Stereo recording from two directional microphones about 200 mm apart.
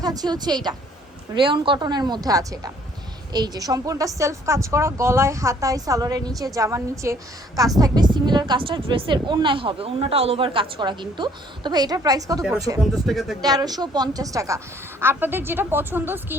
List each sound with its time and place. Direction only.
0.0 s a woman's voice: 20° right (ahead or behind)
12.8 s speech: centre (ahead or behind)
13.4 s a woman's voice: 20° right (ahead or behind)